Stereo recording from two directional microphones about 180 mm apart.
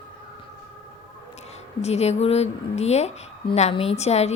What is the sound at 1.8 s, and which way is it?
A woman's voice, 35° left (ahead or behind).